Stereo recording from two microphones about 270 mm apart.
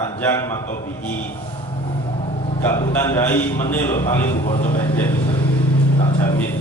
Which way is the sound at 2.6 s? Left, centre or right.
Centre.